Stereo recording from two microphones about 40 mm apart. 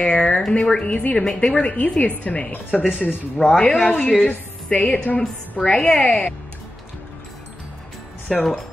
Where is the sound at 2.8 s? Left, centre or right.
Centre.